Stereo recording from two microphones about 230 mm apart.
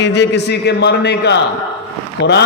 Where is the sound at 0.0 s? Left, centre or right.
Left.